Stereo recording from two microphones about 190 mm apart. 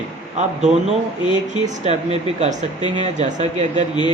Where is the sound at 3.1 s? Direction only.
35° right (ahead or behind).